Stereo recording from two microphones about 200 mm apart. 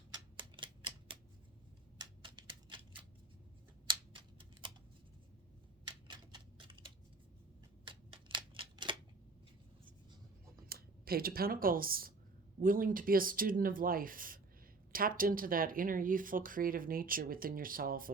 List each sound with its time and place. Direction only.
0.1 s typewriter: 25° right (ahead or behind)
2.0 s typewriter: 25° right (ahead or behind)
3.8 s typing: 25° right (ahead or behind)
6.1 s typewriter: 25° right (ahead or behind)
10.7 s speech: 50° right (ahead or behind)